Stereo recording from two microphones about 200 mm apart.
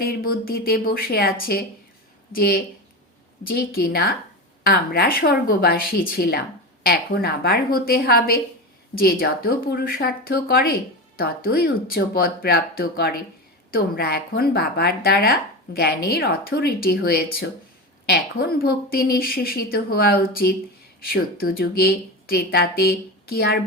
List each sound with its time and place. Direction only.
0.0 s speech: 50° left (ahead or behind)